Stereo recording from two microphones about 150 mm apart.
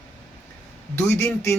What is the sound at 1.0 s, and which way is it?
Speech, 15° left (ahead or behind).